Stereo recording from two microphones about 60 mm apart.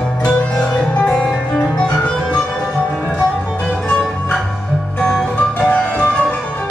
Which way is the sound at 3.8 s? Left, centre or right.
Centre.